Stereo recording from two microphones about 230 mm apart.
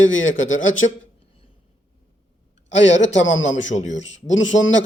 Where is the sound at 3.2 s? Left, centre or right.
Left.